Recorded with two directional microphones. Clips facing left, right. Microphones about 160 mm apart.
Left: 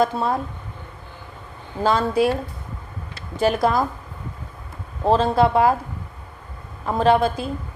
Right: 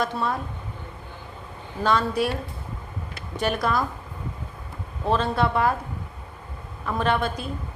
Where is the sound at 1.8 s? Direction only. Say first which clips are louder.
Left 3 dB; 30° left (ahead or behind).